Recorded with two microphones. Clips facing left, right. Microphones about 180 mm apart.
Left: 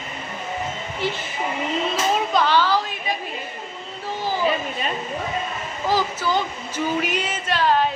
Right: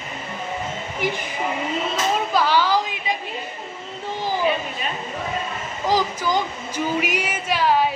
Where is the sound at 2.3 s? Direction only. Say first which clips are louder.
Right 1 dB; 10° right (ahead or behind).